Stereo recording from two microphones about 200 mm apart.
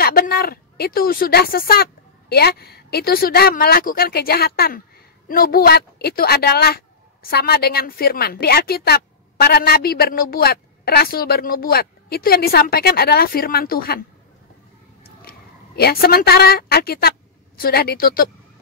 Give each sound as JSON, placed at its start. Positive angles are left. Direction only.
{"t": 0.0, "sound": "a woman's voice", "side_deg": 50}
{"t": 15.2, "sound": "a woman's voice", "side_deg": 50}